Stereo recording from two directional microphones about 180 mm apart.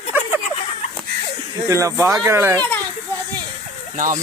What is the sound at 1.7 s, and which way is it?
Speech, 15° right (ahead or behind).